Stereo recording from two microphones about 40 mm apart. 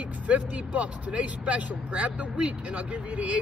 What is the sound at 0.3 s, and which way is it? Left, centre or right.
Speech, right.